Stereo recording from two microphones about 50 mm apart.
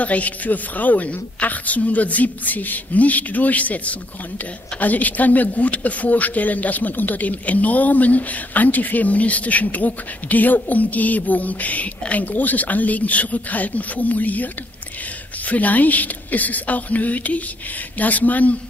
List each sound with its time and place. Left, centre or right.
0.0 s speech: left